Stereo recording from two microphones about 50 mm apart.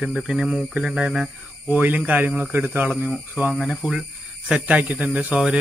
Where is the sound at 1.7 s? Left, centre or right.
Right.